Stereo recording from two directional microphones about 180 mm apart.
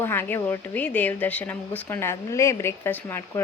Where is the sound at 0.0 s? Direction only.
10° left (ahead or behind).